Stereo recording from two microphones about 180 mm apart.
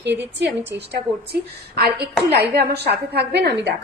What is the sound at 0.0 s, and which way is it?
A woman's voice, 70° right (ahead or behind).